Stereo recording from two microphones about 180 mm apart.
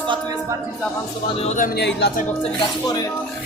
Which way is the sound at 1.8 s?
65° left (ahead or behind).